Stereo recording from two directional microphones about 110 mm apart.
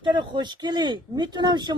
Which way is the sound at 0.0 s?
45° right (ahead or behind).